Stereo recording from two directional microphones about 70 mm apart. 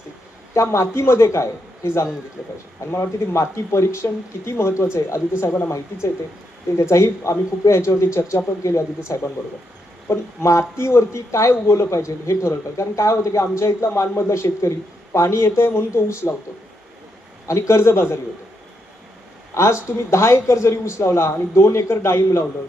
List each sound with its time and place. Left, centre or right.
0.5 s speech: left
17.4 s speech: left
19.5 s speech: left